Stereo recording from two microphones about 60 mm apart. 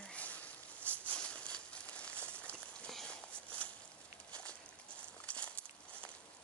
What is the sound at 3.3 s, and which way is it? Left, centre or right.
Walk, left.